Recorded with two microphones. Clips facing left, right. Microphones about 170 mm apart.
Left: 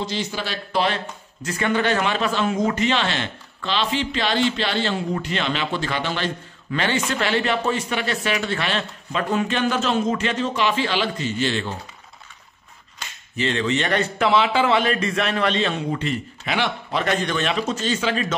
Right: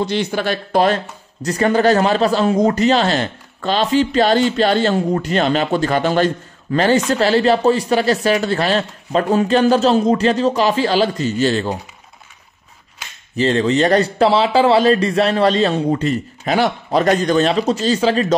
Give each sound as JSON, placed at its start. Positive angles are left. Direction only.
{"t": 0.0, "sound": "a man's voice", "side_deg": -60}
{"t": 13.4, "sound": "a man's voice", "side_deg": -35}